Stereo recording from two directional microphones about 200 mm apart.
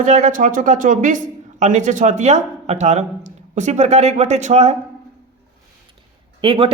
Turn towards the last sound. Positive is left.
turn(degrees=-25)  # may be behind; listen again after turning